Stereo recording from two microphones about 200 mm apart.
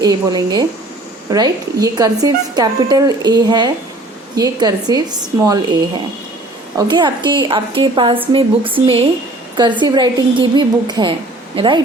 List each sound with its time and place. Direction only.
0.0 s a woman's voice: 20° right (ahead or behind)
6.7 s a woman's voice: 20° right (ahead or behind)